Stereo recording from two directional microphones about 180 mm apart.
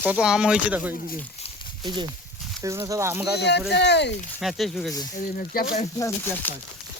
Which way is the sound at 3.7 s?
70° left (ahead or behind).